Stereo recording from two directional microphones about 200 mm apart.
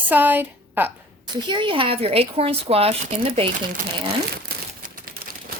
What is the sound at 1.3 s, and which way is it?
Speech, 25° right (ahead or behind).